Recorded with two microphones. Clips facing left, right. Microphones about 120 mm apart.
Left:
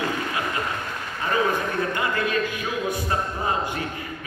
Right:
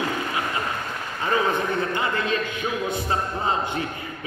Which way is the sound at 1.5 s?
25° right (ahead or behind).